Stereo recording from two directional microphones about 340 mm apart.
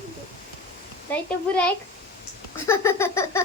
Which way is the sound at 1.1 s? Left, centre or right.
Centre.